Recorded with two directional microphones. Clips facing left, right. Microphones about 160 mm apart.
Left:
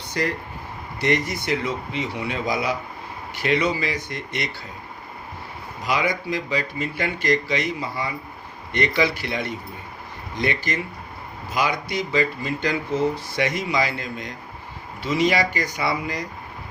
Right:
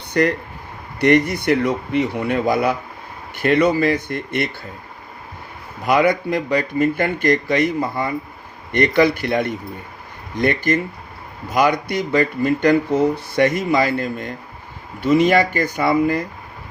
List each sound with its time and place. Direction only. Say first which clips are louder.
0.1 s speech: right 8 dB; 60° right (ahead or behind)
5.8 s speech: right 8 dB; 55° right (ahead or behind)